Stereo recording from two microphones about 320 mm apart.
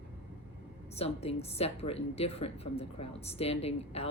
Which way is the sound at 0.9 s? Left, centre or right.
Centre.